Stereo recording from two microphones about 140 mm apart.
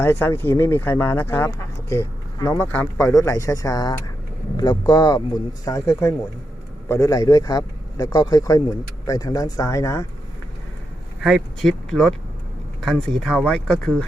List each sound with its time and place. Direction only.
0.0 s a man's voice: 15° left (ahead or behind)
11.2 s speech: 5° right (ahead or behind)